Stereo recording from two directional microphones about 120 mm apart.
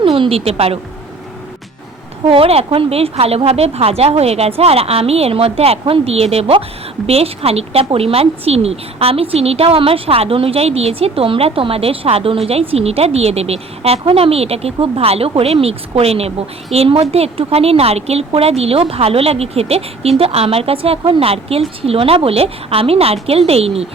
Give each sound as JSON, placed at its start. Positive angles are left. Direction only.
{"t": 0.0, "sound": "speech", "side_deg": -50}
{"t": 2.2, "sound": "a woman's voice", "side_deg": -50}